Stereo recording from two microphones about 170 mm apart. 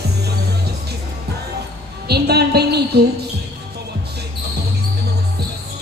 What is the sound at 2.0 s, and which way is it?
Speech, 70° right (ahead or behind).